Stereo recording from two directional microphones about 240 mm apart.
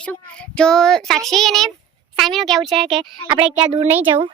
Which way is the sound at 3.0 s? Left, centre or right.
Right.